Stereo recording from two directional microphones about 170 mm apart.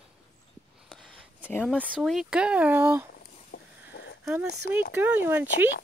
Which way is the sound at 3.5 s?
80° left.